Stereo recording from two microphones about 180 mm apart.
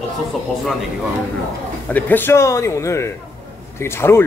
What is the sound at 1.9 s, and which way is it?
Speech, 10° left (ahead or behind).